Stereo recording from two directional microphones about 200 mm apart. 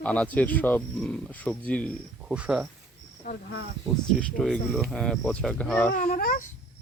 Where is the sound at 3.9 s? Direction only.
Centre (ahead or behind).